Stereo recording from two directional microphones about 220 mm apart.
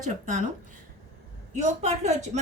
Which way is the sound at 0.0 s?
35° right (ahead or behind).